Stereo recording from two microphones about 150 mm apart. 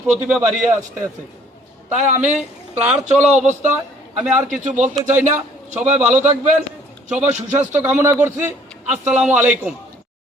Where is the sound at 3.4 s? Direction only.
55° right (ahead or behind).